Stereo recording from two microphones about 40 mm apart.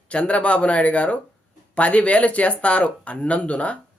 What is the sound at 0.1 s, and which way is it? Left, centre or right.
Speech, left.